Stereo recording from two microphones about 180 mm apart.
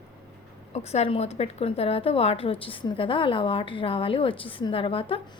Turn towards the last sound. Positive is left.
turn(degrees=30)  # may be behind; listen again after turning